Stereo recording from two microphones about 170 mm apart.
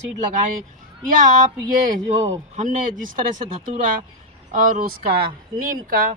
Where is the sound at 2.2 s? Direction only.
45° right (ahead or behind).